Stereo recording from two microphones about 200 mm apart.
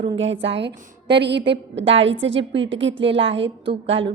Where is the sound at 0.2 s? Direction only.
65° right (ahead or behind).